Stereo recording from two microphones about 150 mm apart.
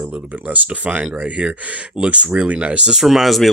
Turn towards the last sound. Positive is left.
turn(degrees=0)  # may be behind; listen again after turning